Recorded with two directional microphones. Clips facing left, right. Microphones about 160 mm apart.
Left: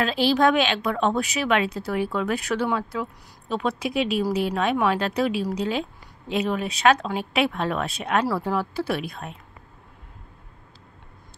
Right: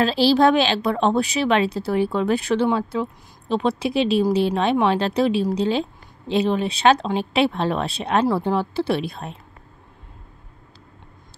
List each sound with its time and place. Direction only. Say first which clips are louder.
0.0 s a woman's voice: right 4 dB; 30° right (ahead or behind)